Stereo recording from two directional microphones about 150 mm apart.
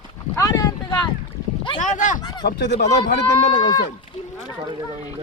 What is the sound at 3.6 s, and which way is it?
Speech, 30° left (ahead or behind).